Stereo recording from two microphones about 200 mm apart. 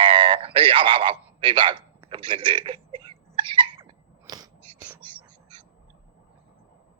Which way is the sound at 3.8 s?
20° right (ahead or behind).